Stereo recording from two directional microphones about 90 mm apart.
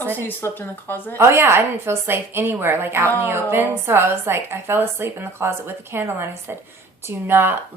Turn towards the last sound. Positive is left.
turn(degrees=-25)  # may be behind; listen again after turning